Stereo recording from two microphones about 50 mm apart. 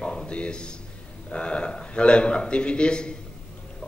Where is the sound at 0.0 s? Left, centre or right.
Centre.